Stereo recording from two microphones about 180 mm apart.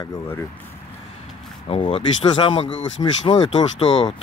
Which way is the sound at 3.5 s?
35° left (ahead or behind).